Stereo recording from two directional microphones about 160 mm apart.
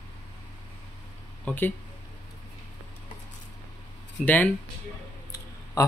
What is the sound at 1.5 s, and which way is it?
Speech, 10° left (ahead or behind).